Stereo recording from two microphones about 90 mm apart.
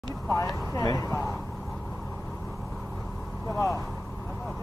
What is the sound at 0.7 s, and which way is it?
Speech, 40° left (ahead or behind).